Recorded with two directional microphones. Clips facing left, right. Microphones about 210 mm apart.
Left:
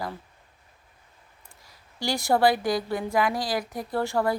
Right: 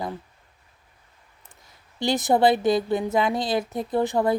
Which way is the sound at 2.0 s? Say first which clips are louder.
Right 3 dB; 20° right (ahead or behind).